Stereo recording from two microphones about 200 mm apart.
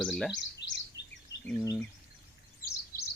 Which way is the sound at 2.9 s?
45° left (ahead or behind).